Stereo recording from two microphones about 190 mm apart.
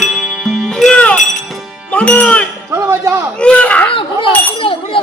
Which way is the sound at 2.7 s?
15° right (ahead or behind).